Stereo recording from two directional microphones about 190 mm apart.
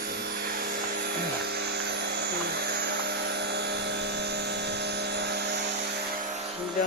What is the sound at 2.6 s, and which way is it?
Helicopter, 55° right (ahead or behind).